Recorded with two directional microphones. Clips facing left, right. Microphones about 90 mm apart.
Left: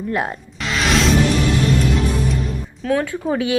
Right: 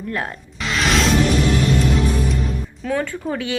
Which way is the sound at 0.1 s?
20° left (ahead or behind).